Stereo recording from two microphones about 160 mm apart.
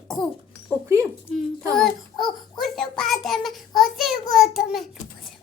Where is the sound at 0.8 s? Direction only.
15° right (ahead or behind).